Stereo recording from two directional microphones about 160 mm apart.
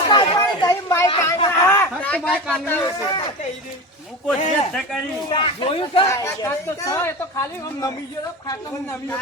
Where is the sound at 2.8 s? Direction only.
25° left (ahead or behind).